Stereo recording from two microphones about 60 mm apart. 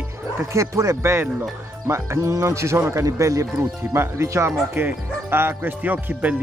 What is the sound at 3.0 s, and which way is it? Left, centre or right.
Speech, right.